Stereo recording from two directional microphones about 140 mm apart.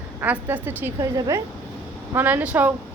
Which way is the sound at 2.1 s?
15° right (ahead or behind).